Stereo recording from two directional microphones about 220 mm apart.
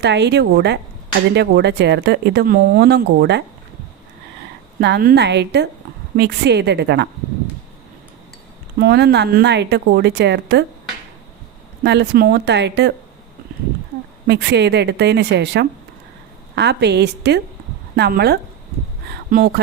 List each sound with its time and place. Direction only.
0.0 s speech: 50° right (ahead or behind)
4.8 s speech: 45° right (ahead or behind)
8.8 s speech: 50° right (ahead or behind)
11.8 s speech: 50° right (ahead or behind)
14.3 s speech: 50° right (ahead or behind)